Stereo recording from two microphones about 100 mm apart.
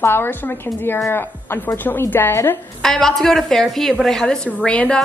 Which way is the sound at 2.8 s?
5° left (ahead or behind).